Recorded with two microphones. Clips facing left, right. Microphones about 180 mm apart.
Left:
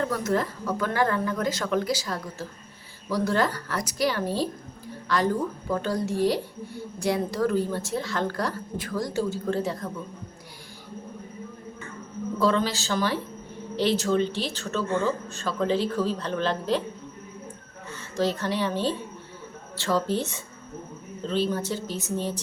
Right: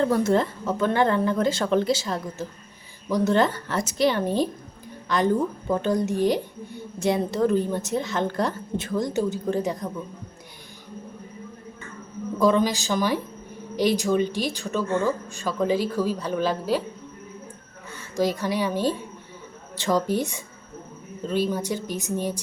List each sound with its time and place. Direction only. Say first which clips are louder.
0.0 s speech: right 5 dB; 30° right (ahead or behind)
12.4 s a woman's voice: right 4 dB; 15° right (ahead or behind)
18.2 s a woman's voice: right 2 dB; 10° right (ahead or behind)